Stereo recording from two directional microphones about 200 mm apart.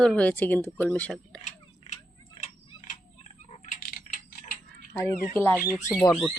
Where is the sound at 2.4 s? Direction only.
35° left (ahead or behind).